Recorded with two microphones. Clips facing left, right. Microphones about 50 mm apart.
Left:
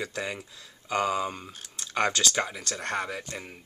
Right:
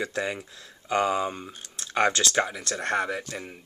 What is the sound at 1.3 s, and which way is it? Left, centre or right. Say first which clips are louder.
Speech: right 2 dB; centre.